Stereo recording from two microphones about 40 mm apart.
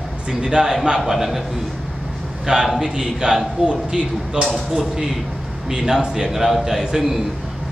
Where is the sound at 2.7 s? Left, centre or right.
Centre.